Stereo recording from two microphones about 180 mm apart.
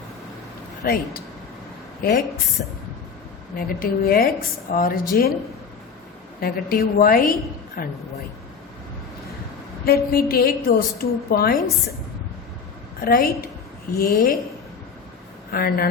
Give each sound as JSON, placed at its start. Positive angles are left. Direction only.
{"t": 0.8, "sound": "a woman's voice", "side_deg": 55}
{"t": 6.4, "sound": "a woman's voice", "side_deg": 55}
{"t": 9.8, "sound": "a woman's voice", "side_deg": 60}
{"t": 13.0, "sound": "a woman's voice", "side_deg": 55}
{"t": 15.5, "sound": "a woman's voice", "side_deg": 60}